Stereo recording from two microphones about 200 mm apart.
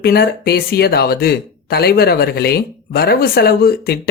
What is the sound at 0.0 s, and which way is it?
Speech, 50° left (ahead or behind).